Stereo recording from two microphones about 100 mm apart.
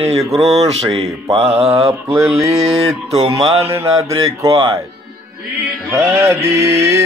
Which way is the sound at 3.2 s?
80° right.